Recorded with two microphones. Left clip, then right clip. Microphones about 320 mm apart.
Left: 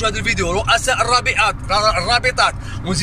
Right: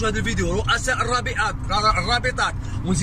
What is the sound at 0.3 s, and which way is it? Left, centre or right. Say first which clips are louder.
Speech: left 7 dB; left.